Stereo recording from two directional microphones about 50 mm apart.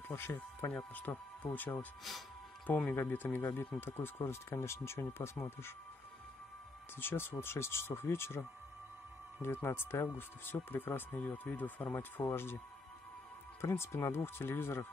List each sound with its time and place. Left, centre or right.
0.1 s speech: left
0.7 s speech: left
2.9 s speech: left
3.3 s speech: left
7.0 s speech: left
13.6 s speech: left